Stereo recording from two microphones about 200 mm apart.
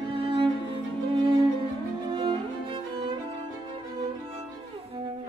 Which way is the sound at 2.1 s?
25° right (ahead or behind).